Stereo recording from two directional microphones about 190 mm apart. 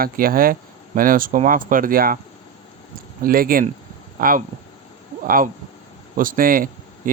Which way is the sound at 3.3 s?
50° right (ahead or behind).